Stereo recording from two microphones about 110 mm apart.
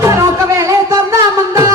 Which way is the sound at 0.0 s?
25° right (ahead or behind).